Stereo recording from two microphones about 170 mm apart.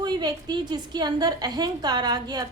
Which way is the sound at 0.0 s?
25° right (ahead or behind).